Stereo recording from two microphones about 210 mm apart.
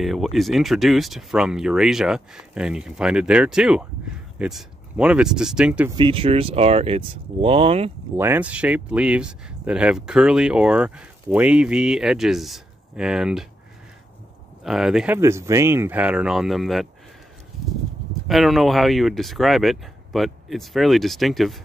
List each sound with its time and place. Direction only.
0.0 s speech: centre (ahead or behind)
5.9 s speech: 25° right (ahead or behind)
8.2 s speech: 10° right (ahead or behind)
14.6 s speech: centre (ahead or behind)
15.1 s speech: 15° right (ahead or behind)
17.6 s a sound: centre (ahead or behind)
18.3 s speech: centre (ahead or behind)